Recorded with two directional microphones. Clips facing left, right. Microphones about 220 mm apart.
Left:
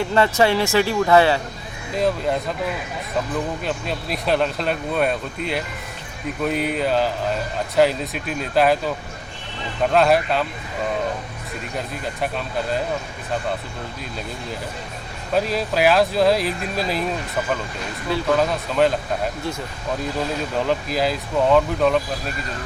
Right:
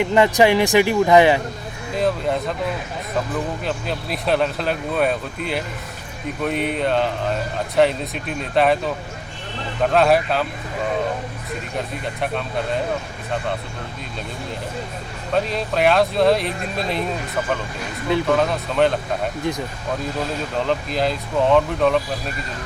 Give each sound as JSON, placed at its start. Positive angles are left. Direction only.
{"t": 0.0, "sound": "speech", "side_deg": -15}
{"t": 2.0, "sound": "speech", "side_deg": 0}
{"t": 3.6, "sound": "speech", "side_deg": 0}
{"t": 9.9, "sound": "speech", "side_deg": 0}
{"t": 15.4, "sound": "speech", "side_deg": 5}
{"t": 18.3, "sound": "speech", "side_deg": 0}
{"t": 20.7, "sound": "speech", "side_deg": 5}